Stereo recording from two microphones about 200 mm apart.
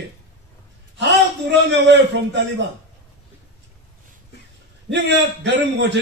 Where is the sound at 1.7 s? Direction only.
60° right (ahead or behind).